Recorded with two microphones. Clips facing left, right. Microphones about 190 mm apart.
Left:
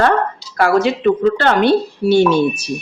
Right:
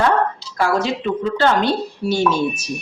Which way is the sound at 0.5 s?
60° left (ahead or behind).